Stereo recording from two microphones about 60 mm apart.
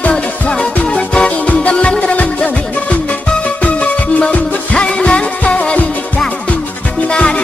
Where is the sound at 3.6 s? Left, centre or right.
Left.